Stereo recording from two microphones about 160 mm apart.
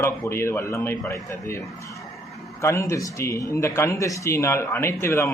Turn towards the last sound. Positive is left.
turn(degrees=15)  # may be behind; listen again after turning